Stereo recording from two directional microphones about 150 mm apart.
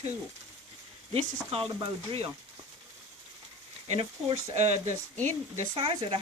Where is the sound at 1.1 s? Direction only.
40° right (ahead or behind).